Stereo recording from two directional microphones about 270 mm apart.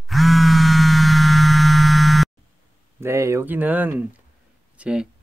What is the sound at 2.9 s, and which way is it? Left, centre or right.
Speech, centre.